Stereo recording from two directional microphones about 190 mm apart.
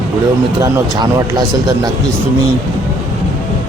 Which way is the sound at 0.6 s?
20° right (ahead or behind).